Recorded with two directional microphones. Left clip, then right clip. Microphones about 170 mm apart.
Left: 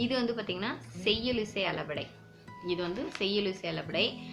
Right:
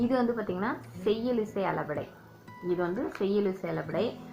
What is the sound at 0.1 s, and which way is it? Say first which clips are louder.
Speech: right 3 dB; 25° right (ahead or behind).